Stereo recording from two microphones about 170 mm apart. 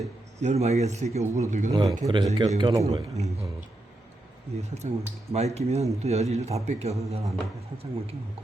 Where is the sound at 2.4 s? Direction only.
30° right (ahead or behind).